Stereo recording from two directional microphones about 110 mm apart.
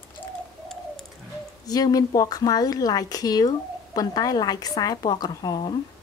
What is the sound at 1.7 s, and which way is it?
Speech, 35° left (ahead or behind).